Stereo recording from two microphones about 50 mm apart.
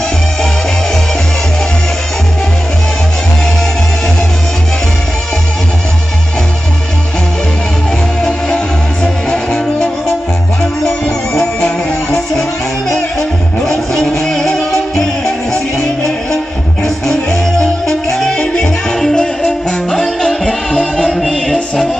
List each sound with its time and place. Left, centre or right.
8.2 s music: centre
11.3 s music: centre